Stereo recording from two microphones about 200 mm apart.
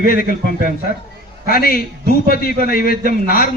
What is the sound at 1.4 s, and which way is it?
A man's voice, 45° left (ahead or behind).